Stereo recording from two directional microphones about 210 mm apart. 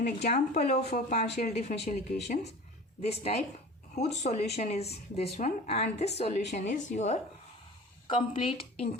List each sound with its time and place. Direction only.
0.0 s speech: 35° left (ahead or behind)